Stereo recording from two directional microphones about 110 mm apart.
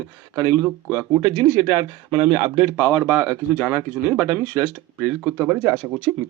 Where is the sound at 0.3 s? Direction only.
25° right (ahead or behind).